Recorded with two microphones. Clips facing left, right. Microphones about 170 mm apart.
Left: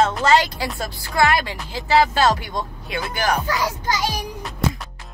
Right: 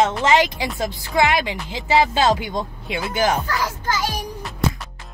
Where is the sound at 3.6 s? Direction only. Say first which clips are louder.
Left 1 dB; 15° left (ahead or behind).